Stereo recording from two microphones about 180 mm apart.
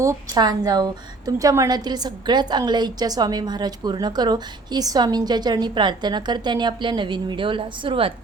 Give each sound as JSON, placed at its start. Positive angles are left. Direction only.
{"t": 0.0, "sound": "a woman's voice", "side_deg": -20}